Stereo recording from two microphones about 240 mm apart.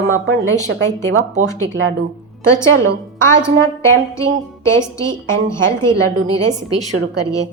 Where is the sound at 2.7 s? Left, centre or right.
Right.